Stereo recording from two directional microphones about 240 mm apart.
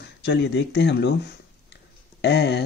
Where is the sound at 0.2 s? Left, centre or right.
Left.